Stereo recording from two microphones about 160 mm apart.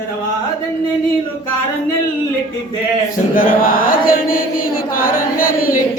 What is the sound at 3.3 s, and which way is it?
Chant, 60° left (ahead or behind).